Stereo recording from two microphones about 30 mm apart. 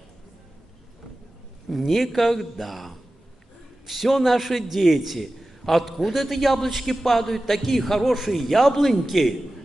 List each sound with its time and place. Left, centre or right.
1.9 s a man's voice: centre